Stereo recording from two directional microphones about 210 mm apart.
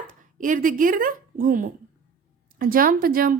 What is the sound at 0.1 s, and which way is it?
A woman's voice, 40° right (ahead or behind).